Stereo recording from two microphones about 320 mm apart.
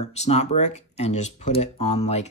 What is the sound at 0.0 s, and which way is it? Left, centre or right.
Speech, centre.